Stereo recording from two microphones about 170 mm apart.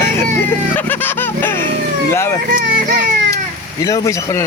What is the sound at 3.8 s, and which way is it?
Speech, 20° left (ahead or behind).